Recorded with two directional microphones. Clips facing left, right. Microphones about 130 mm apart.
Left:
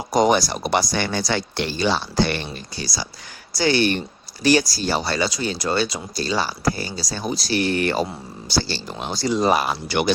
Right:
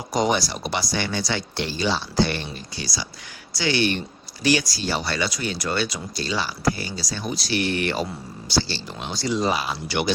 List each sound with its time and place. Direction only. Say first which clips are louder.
0.1 s speech: left 5 dB; 45° left (ahead or behind); by 2.5 s 65° left (ahead or behind)
2.7 s speech: left 2 dB; 40° left (ahead or behind)